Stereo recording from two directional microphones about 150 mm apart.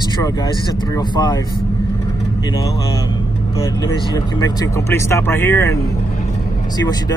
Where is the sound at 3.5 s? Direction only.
25° left (ahead or behind).